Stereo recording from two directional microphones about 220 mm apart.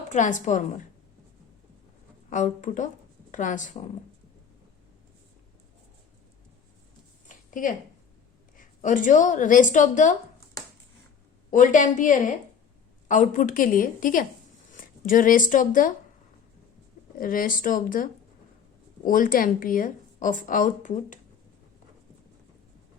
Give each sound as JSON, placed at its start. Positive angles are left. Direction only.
{"t": 0.1, "sound": "a woman's voice", "side_deg": 35}
{"t": 2.3, "sound": "a woman's voice", "side_deg": 35}
{"t": 7.3, "sound": "a sound", "side_deg": 35}
{"t": 8.5, "sound": "a woman's voice", "side_deg": 35}
{"t": 11.5, "sound": "a woman's voice", "side_deg": 35}
{"t": 17.2, "sound": "a woman's voice", "side_deg": 40}